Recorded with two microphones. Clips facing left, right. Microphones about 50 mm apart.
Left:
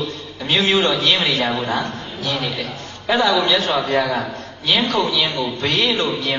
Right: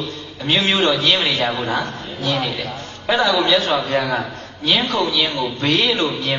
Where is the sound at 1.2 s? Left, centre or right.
Left.